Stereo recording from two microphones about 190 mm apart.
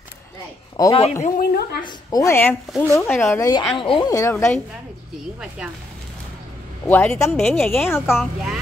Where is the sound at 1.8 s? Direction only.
20° left (ahead or behind).